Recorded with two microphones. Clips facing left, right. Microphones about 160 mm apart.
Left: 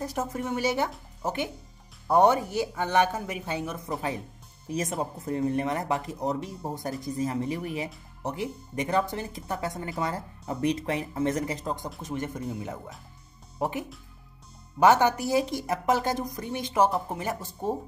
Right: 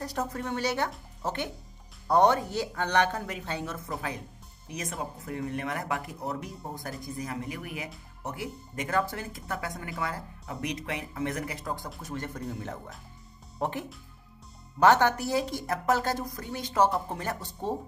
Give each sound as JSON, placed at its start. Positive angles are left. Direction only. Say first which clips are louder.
{"t": 0.0, "sound": "speech", "louder": "left 2 dB", "side_deg": 15}
{"t": 4.6, "sound": "speech", "louder": "left 6 dB", "side_deg": 30}